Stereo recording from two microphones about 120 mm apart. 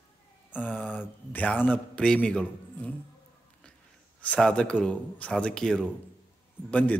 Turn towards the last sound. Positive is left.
turn(degrees=15)  # may be behind; listen again after turning